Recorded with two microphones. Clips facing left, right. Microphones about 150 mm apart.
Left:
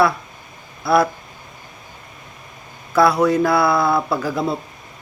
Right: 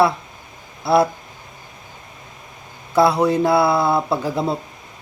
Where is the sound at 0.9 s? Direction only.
25° right (ahead or behind).